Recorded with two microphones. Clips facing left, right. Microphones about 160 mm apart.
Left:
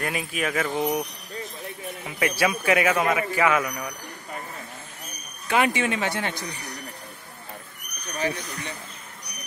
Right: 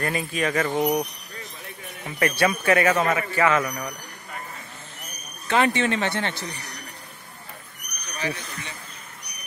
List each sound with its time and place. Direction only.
0.0 s speech: 5° left (ahead or behind)
2.0 s speech: 10° left (ahead or behind)
5.5 s speech: 10° left (ahead or behind)